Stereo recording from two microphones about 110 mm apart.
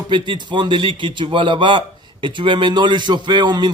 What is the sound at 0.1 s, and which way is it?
A man's voice, 45° right (ahead or behind).